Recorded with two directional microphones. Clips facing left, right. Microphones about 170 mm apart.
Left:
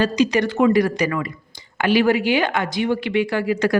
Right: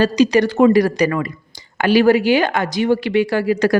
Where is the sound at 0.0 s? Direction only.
35° right (ahead or behind).